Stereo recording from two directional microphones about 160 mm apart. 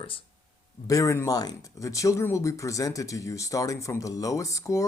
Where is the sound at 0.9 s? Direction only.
20° left (ahead or behind).